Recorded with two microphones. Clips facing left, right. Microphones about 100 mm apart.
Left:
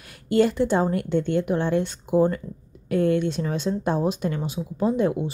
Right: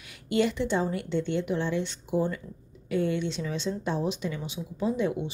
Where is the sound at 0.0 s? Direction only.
45° left (ahead or behind).